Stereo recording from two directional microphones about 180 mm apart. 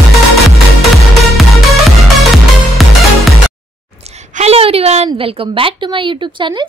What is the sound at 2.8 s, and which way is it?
Music, centre (ahead or behind).